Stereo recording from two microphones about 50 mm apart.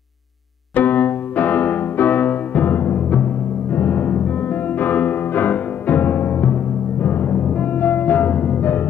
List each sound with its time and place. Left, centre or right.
0.7 s music: left